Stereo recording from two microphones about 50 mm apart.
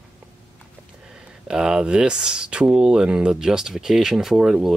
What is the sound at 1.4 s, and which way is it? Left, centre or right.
Speech, centre.